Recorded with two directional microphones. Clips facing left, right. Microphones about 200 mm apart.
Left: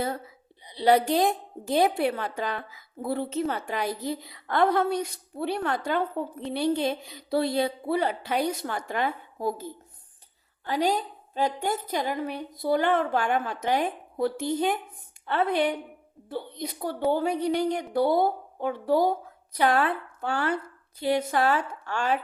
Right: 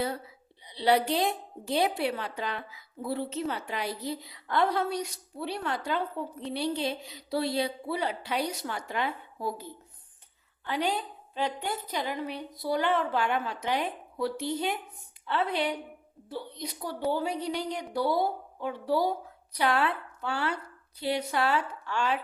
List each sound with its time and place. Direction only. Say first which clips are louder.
0.6 s a woman's voice: left 4 dB; 45° left (ahead or behind)
10.7 s a woman's voice: left 4 dB; 40° left (ahead or behind)